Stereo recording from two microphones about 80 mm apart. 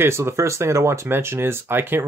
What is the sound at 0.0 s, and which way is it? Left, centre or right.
Speech, right.